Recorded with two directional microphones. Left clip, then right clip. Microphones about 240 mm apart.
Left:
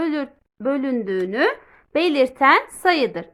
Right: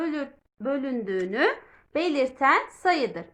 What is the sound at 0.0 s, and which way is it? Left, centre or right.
A woman's voice, left.